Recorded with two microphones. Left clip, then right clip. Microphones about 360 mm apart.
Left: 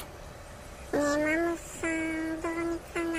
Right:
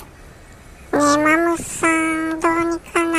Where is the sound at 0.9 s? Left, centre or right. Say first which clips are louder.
Right 12 dB; centre.